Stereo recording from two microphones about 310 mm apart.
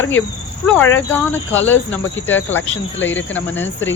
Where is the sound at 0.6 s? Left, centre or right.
Centre.